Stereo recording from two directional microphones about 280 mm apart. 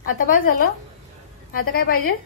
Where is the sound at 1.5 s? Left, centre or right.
Left.